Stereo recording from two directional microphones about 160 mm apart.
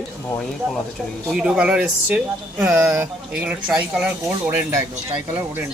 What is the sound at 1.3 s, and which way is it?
Speech, 5° right (ahead or behind).